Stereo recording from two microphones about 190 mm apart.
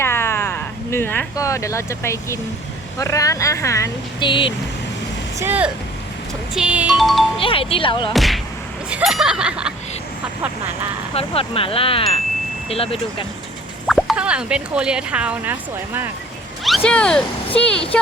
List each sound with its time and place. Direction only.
0.0 s a sound: 10° left (ahead or behind)
3.0 s speech: 15° left (ahead or behind)
5.4 s speech: 10° right (ahead or behind)
7.3 s speech: 30° left (ahead or behind)
8.1 s speech: centre (ahead or behind)
11.1 s speech: 30° left (ahead or behind)
13.8 s speech: centre (ahead or behind)
16.6 s speech: 5° left (ahead or behind)